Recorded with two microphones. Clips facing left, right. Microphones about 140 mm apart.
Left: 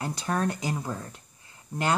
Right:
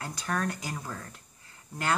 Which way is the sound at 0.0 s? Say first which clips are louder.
Left 4 dB; 25° left (ahead or behind).